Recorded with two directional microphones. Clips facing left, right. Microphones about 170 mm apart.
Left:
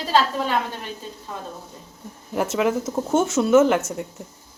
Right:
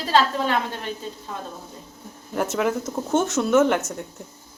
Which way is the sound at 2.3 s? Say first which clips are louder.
Left 2 dB; 5° left (ahead or behind).